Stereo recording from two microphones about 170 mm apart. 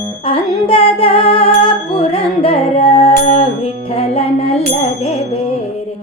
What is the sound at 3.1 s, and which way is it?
Music, 50° left (ahead or behind).